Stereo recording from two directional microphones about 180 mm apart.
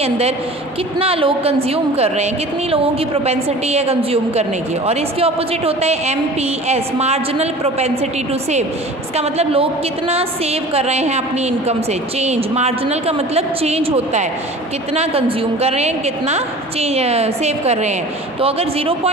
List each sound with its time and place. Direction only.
0.9 s a woman's voice: 30° right (ahead or behind)
9.1 s a woman's voice: 35° right (ahead or behind)